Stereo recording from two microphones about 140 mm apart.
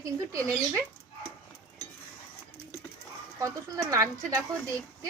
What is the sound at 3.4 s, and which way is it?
Speech, 20° right (ahead or behind).